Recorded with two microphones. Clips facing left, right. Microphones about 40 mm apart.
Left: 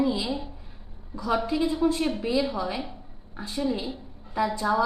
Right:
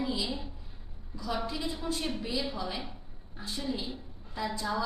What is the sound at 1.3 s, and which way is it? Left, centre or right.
A woman's voice, centre.